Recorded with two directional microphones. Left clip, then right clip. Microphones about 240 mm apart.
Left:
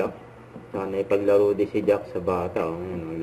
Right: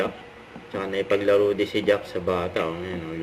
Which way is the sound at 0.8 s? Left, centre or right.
Centre.